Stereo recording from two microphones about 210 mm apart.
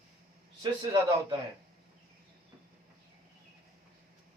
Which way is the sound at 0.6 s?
20° right (ahead or behind).